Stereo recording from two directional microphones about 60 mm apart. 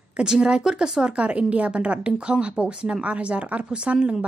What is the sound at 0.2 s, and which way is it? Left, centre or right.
A woman's voice, centre.